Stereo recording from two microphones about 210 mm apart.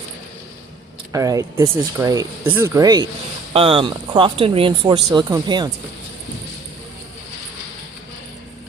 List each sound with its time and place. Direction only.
1.1 s speech: 15° right (ahead or behind)